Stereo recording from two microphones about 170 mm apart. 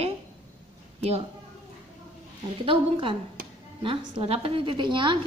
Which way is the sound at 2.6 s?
30° right (ahead or behind).